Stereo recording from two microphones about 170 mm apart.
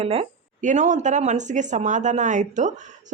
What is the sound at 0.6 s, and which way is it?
Speech, 45° right (ahead or behind).